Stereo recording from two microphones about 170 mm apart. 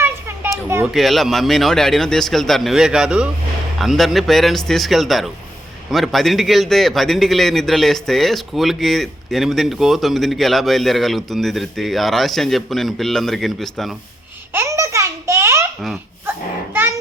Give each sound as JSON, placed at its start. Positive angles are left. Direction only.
{"t": 0.0, "sound": "children playing", "side_deg": -15}
{"t": 0.9, "sound": "a man's voice", "side_deg": 0}
{"t": 14.5, "sound": "babbling", "side_deg": -15}